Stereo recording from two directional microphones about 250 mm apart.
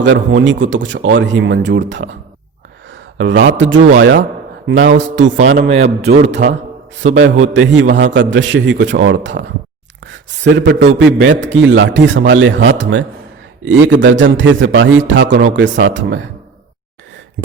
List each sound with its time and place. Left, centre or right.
0.0 s a man's voice: right
5.8 s a man's voice: right
6.2 s a man's voice: right
10.9 s a man's voice: right